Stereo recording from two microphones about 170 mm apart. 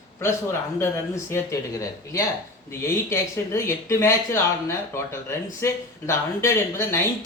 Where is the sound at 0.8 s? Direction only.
15° left (ahead or behind).